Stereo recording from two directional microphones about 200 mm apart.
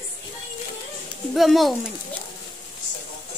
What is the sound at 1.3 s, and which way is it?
Speech, centre (ahead or behind).